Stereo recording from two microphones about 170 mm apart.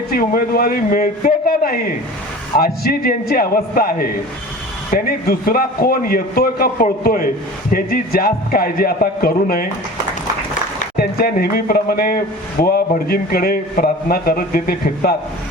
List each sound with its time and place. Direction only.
0.1 s a man's voice: 60° left (ahead or behind)
10.9 s a man's voice: 60° left (ahead or behind)